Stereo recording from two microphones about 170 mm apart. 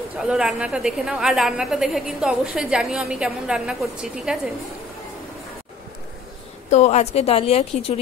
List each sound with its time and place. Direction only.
0.2 s a woman's voice: 5° right (ahead or behind)
6.7 s a woman's voice: 40° left (ahead or behind)